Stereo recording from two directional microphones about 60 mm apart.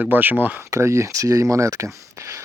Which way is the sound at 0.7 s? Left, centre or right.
Right.